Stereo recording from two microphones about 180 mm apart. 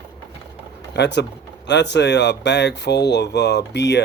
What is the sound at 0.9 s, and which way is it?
Speech, 70° left (ahead or behind).